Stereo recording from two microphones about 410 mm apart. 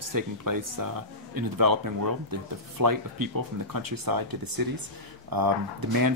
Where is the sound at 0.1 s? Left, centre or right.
Right.